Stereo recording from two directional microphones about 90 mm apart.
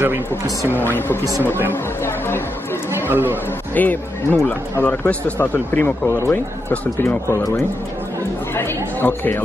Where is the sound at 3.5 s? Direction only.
20° left (ahead or behind).